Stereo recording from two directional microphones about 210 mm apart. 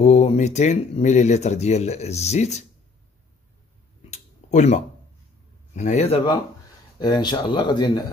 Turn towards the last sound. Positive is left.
turn(degrees=20)  # may be behind; listen again after turning